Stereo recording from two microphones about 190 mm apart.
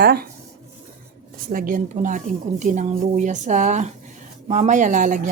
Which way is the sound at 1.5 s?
45° right (ahead or behind).